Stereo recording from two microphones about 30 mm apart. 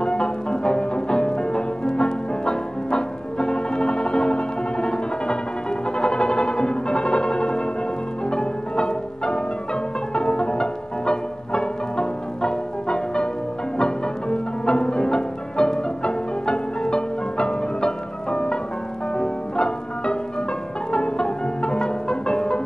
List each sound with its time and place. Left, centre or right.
0.0 s music: left